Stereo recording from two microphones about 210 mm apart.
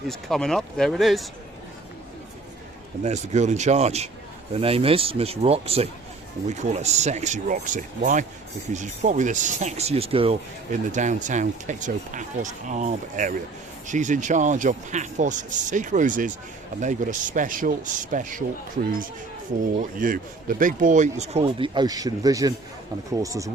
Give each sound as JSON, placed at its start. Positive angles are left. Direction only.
{"t": 0.1, "sound": "speech", "side_deg": 0}
{"t": 3.0, "sound": "speech", "side_deg": -35}